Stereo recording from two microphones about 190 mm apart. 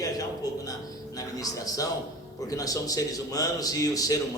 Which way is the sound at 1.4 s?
20° left (ahead or behind).